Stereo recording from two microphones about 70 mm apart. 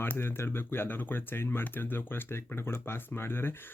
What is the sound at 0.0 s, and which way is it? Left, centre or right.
Speech, left.